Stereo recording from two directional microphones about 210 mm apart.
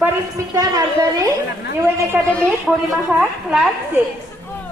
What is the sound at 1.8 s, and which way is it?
Speech, 10° right (ahead or behind).